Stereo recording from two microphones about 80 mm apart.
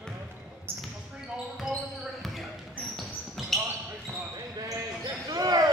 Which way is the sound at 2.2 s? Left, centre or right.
Centre.